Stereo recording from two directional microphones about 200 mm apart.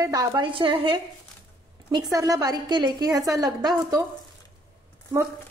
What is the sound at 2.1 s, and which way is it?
A woman's voice, 15° right (ahead or behind).